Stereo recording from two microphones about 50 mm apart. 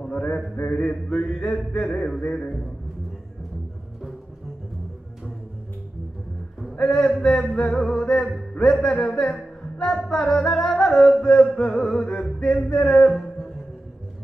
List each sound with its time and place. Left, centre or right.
0.1 s mantra: left
0.6 s music: centre
6.8 s music: centre